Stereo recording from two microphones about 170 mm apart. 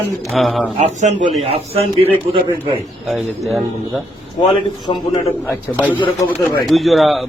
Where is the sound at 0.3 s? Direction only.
Centre (ahead or behind).